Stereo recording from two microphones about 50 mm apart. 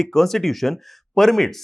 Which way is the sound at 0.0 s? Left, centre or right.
Centre.